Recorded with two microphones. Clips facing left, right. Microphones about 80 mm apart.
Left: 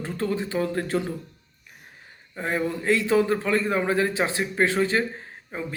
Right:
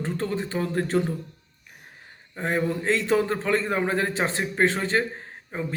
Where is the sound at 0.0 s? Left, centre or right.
Right.